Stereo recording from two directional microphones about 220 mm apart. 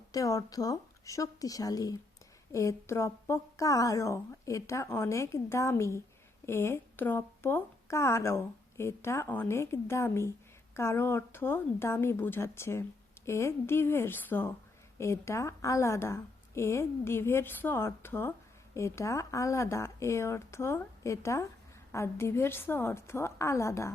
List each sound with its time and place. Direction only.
0.1 s a woman's voice: 15° left (ahead or behind)